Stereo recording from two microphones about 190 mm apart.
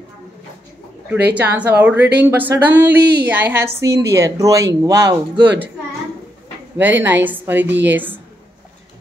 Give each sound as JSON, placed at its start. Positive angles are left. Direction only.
{"t": 1.3, "sound": "speech", "side_deg": -10}
{"t": 3.0, "sound": "speech", "side_deg": -55}
{"t": 3.3, "sound": "speech", "side_deg": -10}
{"t": 6.8, "sound": "speech", "side_deg": -10}